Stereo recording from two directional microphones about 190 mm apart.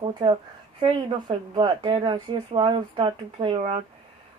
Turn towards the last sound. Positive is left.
turn(degrees=-25)  # may be behind; listen again after turning